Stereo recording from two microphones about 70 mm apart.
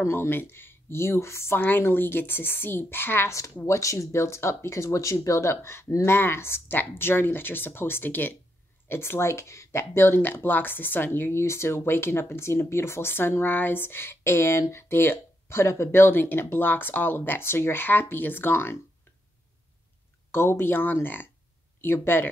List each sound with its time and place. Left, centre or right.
0.0 s speech: left
3.3 s speech: left
20.2 s speech: left